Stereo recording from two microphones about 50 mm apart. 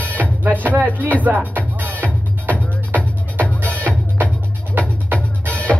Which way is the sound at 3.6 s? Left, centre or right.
Left.